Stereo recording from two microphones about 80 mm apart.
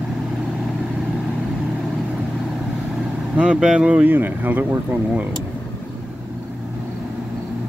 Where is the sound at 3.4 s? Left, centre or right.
Centre.